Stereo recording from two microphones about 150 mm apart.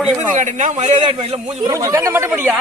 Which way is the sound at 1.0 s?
40° right (ahead or behind).